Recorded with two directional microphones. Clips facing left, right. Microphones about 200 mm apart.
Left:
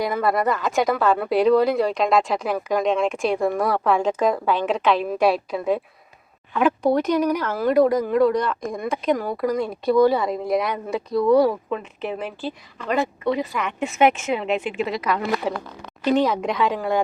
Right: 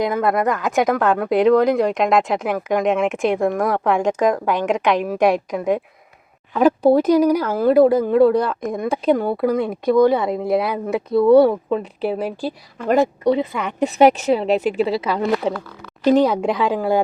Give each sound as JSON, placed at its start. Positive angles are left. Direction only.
{"t": 0.0, "sound": "speech", "side_deg": -20}
{"t": 0.3, "sound": "speech", "side_deg": 0}
{"t": 1.2, "sound": "speech", "side_deg": -20}
{"t": 1.7, "sound": "speech", "side_deg": 0}
{"t": 2.1, "sound": "speech", "side_deg": -20}
{"t": 2.8, "sound": "speech", "side_deg": -5}
{"t": 3.6, "sound": "speech", "side_deg": -15}
{"t": 6.5, "sound": "speech", "side_deg": -35}
{"t": 6.9, "sound": "speech", "side_deg": -10}
{"t": 7.6, "sound": "speech", "side_deg": -30}
{"t": 13.3, "sound": "speech", "side_deg": -25}